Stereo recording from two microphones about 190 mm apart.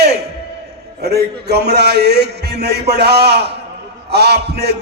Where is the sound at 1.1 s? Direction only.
60° right (ahead or behind).